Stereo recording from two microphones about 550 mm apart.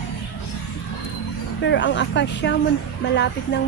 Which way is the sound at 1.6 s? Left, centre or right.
Centre.